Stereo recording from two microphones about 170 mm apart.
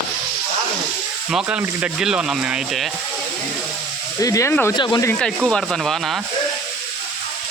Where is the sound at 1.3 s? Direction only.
5° right (ahead or behind).